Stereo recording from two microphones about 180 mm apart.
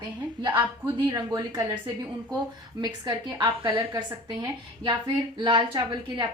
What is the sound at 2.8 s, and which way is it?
A woman's voice, 25° right (ahead or behind).